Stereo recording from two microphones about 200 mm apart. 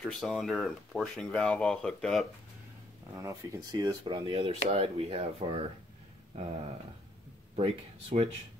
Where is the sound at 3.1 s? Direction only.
15° right (ahead or behind).